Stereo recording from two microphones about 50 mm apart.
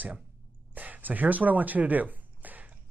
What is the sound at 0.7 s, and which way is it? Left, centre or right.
Speech, right.